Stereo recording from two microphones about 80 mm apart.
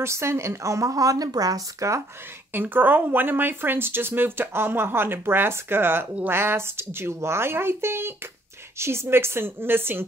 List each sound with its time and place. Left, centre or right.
0.0 s a woman's voice: right
2.5 s a woman's voice: right